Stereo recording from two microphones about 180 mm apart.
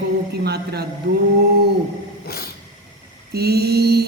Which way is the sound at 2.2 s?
60° left (ahead or behind).